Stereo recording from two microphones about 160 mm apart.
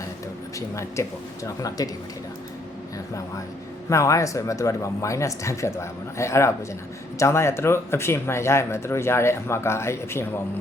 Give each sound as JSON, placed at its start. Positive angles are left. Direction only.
{"t": 1.0, "sound": "speech", "side_deg": 20}
{"t": 3.8, "sound": "speech", "side_deg": 20}